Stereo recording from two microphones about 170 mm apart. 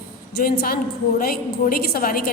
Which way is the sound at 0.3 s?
65° left (ahead or behind).